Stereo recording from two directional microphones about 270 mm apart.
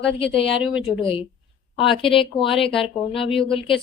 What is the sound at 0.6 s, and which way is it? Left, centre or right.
Speech, centre.